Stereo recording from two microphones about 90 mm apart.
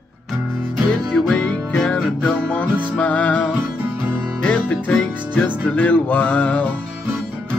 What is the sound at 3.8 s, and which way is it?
Music, 20° right (ahead or behind).